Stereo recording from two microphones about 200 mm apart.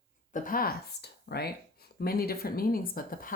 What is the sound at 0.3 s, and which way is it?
Speech, 45° left (ahead or behind).